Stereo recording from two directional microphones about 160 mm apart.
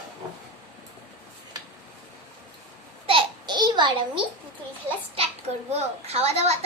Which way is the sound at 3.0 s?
30° right (ahead or behind).